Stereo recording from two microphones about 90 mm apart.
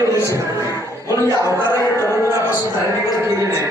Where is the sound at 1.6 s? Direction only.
35° left (ahead or behind).